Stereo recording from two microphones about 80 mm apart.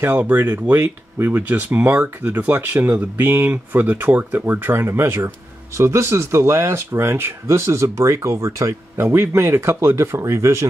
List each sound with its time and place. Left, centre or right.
0.0 s speech: right